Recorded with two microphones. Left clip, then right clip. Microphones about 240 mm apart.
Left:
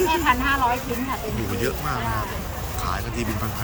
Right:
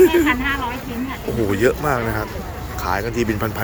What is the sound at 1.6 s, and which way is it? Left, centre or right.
Speech, centre.